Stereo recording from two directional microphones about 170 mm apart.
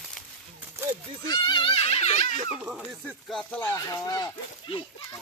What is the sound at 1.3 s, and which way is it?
Music, 25° left (ahead or behind).